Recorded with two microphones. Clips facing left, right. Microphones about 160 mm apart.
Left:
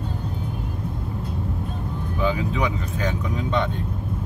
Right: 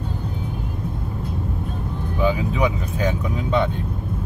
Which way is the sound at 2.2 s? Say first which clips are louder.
Right 3 dB; 10° right (ahead or behind).